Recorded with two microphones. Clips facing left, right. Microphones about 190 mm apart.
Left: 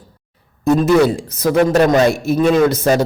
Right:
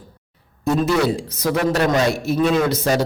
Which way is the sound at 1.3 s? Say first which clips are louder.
Left 6 dB; 50° left (ahead or behind).